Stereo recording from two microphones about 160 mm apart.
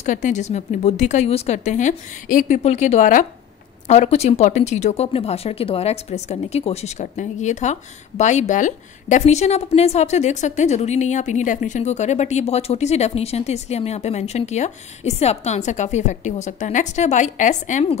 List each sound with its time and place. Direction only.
0.0 s speech: 50° left (ahead or behind)